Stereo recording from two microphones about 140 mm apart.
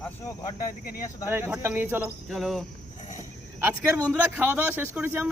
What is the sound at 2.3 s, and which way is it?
Cricket, centre (ahead or behind).